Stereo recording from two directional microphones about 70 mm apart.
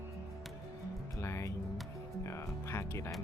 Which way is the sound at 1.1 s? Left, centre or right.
Left.